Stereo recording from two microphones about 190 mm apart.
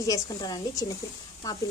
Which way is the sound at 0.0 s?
20° left (ahead or behind).